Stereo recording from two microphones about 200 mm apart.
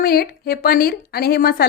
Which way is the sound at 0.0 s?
50° left (ahead or behind).